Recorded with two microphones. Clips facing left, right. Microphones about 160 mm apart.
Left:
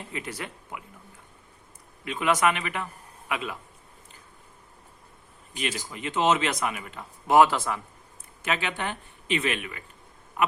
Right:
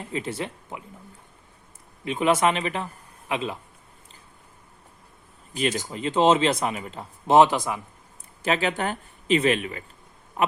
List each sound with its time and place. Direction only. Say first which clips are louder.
0.1 s speech: right 7 dB; 25° right (ahead or behind)
2.0 s speech: right 3 dB; 25° right (ahead or behind)
5.7 s speech: right 6 dB; 30° right (ahead or behind)
8.4 s speech: right 5 dB; 35° right (ahead or behind)